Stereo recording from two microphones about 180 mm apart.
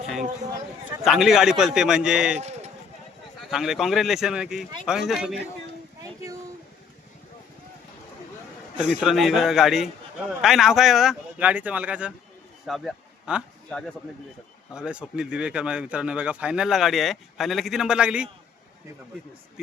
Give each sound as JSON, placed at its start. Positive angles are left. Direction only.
{"t": 1.0, "sound": "a man's voice", "side_deg": 0}
{"t": 2.4, "sound": "sheep", "side_deg": -35}
{"t": 3.5, "sound": "a man's voice", "side_deg": 0}
{"t": 8.8, "sound": "a man's voice", "side_deg": -5}